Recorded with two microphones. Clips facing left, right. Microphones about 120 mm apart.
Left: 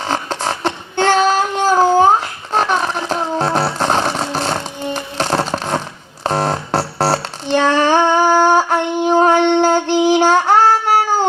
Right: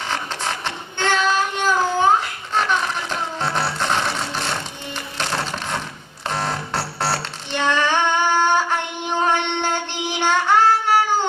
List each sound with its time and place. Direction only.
0.0 s child singing: 35° left (ahead or behind)
6.2 s music: 40° left (ahead or behind)